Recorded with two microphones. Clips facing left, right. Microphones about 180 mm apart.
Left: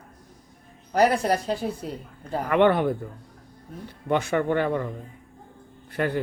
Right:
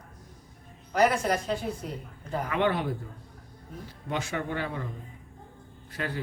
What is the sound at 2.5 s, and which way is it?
Speech, 60° left (ahead or behind).